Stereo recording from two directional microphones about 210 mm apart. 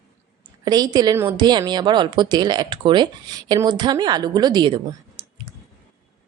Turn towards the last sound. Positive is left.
turn(degrees=-25)  # may be behind; listen again after turning